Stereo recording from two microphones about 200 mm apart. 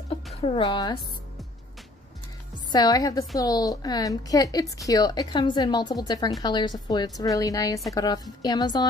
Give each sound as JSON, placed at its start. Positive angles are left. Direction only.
{"t": 0.4, "sound": "a woman's voice", "side_deg": 25}
{"t": 2.7, "sound": "a woman's voice", "side_deg": 20}